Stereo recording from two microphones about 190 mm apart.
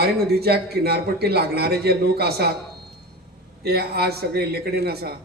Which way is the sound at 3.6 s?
55° right (ahead or behind).